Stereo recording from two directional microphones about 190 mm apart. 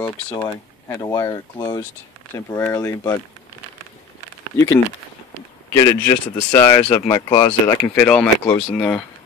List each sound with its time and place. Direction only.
0.0 s speech: 15° left (ahead or behind)
5.7 s speech: 15° left (ahead or behind)
7.4 s speech: 10° left (ahead or behind)